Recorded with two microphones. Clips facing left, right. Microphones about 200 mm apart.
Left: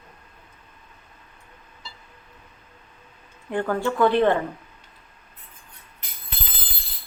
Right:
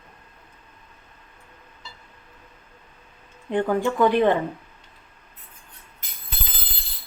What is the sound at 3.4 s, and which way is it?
Speech, 15° right (ahead or behind).